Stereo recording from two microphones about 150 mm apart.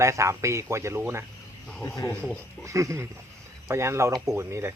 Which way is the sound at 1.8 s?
20° left (ahead or behind).